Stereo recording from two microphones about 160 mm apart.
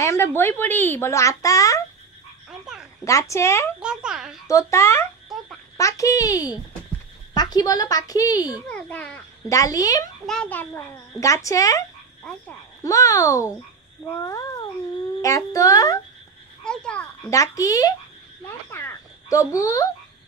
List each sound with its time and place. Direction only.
0.0 s a child's voice: 15° left (ahead or behind)
3.1 s a child's voice: 20° left (ahead or behind)
3.8 s a child's voice: 5° right (ahead or behind)
4.5 s a child's voice: 20° left (ahead or behind)
8.6 s a child's voice: 10° left (ahead or behind)
9.5 s a child's voice: 20° left (ahead or behind)
10.2 s a child's voice: 5° left (ahead or behind)
12.2 s speech: 10° left (ahead or behind)
12.8 s a child's voice: 20° left (ahead or behind)
16.6 s speech: 5° left (ahead or behind)
17.3 s a child's voice: 20° left (ahead or behind)
18.7 s frog: 15° left (ahead or behind)